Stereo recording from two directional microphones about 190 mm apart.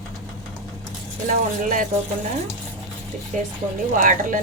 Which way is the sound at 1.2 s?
45° right (ahead or behind).